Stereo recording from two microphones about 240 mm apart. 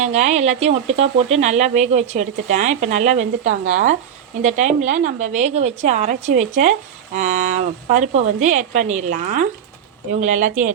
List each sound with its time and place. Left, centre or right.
0.0 s a woman's voice: right